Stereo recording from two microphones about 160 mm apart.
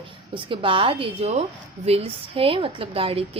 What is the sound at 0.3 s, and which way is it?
A woman's voice, 30° right (ahead or behind).